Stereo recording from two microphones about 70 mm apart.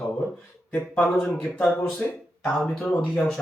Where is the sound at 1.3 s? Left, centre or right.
Left.